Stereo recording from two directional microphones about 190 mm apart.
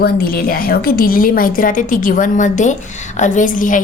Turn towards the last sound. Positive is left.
turn(degrees=45)  # may be behind; listen again after turning